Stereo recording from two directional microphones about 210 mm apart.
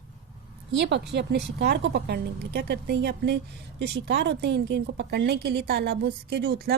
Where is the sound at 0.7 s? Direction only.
55° right (ahead or behind).